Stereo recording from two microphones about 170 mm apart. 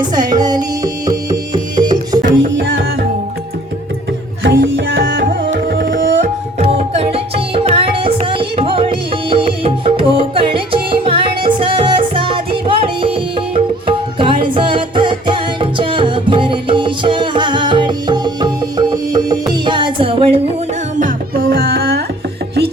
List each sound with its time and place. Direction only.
0.0 s music: 25° right (ahead or behind)
4.4 s tabla: 90° right; by 20.4 s 35° right (ahead or behind)
21.0 s music: 60° right (ahead or behind)